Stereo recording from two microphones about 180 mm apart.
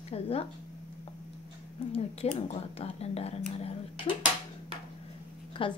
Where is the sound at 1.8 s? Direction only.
35° left (ahead or behind).